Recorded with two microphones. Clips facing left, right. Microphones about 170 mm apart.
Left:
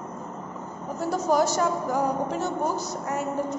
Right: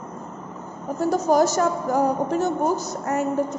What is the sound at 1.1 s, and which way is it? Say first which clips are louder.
A woman's voice: right 4 dB; 45° right (ahead or behind).